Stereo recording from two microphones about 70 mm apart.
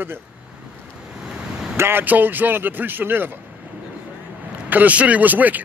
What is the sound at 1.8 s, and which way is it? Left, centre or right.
Speech, right.